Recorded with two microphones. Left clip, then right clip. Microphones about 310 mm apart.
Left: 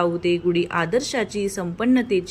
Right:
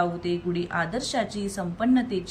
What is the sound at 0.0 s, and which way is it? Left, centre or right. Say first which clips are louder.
A woman's voice: left 6 dB; centre.